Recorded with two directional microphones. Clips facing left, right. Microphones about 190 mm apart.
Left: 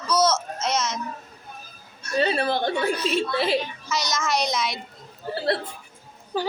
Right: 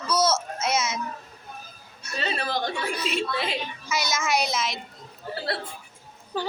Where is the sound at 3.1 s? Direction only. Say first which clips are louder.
Left 5 dB; 35° left (ahead or behind).